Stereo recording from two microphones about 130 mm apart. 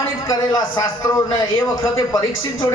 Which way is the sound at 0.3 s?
30° left (ahead or behind).